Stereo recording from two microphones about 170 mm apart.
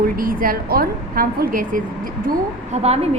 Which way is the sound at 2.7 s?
40° right (ahead or behind).